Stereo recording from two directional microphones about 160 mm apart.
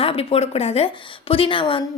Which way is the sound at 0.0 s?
35° left (ahead or behind).